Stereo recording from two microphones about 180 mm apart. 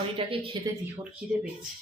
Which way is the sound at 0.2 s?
30° right (ahead or behind).